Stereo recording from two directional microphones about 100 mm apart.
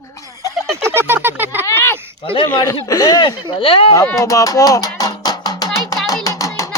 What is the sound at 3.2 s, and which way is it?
Speech, 60° left (ahead or behind).